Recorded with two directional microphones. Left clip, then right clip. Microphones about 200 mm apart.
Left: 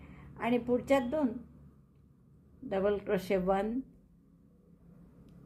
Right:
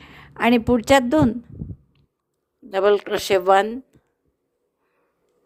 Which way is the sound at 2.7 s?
50° right (ahead or behind).